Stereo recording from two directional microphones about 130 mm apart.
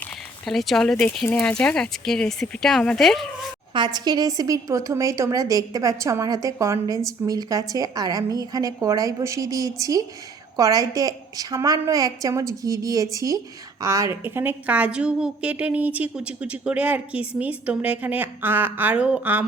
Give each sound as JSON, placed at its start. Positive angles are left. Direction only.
{"t": 0.0, "sound": "speech", "side_deg": 0}
{"t": 3.8, "sound": "a woman's voice", "side_deg": -35}